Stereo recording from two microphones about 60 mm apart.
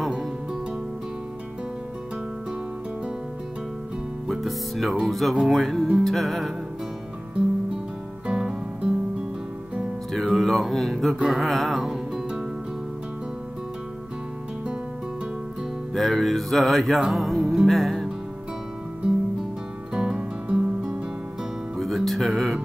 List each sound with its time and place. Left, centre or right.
0.0 s music: centre
4.3 s music: centre
8.3 s music: centre
10.1 s music: centre
15.9 s music: centre
19.9 s music: centre
21.7 s music: centre